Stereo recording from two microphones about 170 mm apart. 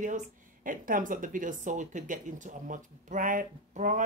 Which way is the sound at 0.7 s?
50° right (ahead or behind).